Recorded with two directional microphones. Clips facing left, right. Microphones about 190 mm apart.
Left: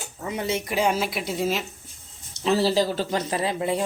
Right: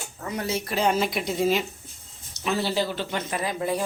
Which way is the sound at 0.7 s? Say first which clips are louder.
Right 1 dB; 5° left (ahead or behind).